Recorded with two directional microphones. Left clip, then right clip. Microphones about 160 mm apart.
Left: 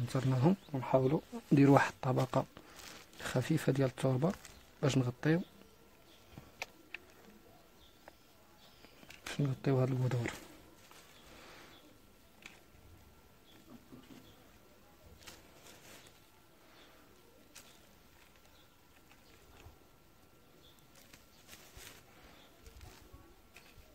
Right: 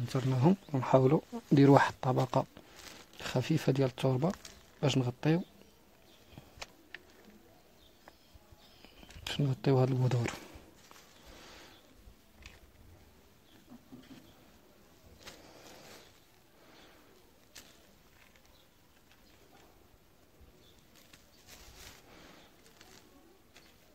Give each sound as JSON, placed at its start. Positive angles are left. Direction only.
{"t": 0.1, "sound": "speech", "side_deg": -5}
{"t": 0.7, "sound": "speech", "side_deg": -25}
{"t": 1.3, "sound": "speech", "side_deg": -5}
{"t": 8.8, "sound": "speech", "side_deg": -10}
{"t": 11.3, "sound": "a sound", "side_deg": -5}
{"t": 15.3, "sound": "a sound", "side_deg": -15}